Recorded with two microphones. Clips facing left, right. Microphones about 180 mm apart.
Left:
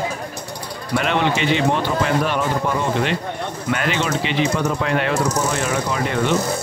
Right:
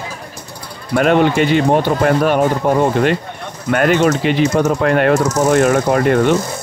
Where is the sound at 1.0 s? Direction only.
50° right (ahead or behind).